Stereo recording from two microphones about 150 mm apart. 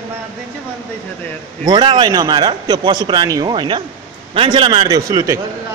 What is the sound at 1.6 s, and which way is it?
A man's voice, 30° right (ahead or behind).